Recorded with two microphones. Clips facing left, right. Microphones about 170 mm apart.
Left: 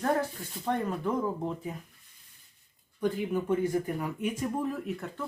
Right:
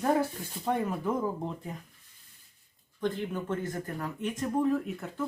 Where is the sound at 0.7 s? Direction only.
5° right (ahead or behind).